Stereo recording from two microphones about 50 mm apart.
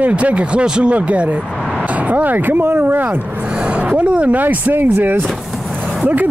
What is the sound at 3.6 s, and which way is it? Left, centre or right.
Speech, right.